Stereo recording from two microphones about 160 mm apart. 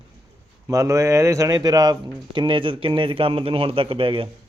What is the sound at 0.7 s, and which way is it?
Speech, 20° right (ahead or behind).